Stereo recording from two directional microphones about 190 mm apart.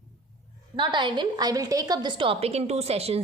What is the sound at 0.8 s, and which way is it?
A woman's voice, 25° right (ahead or behind).